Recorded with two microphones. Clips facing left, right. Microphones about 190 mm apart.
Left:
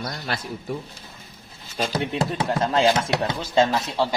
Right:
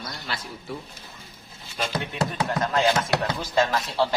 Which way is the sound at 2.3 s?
30° left (ahead or behind).